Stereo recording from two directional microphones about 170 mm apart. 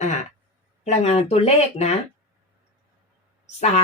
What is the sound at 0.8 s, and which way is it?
Speech, 40° left (ahead or behind).